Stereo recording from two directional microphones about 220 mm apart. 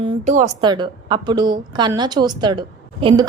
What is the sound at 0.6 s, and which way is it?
A woman's voice, 20° right (ahead or behind).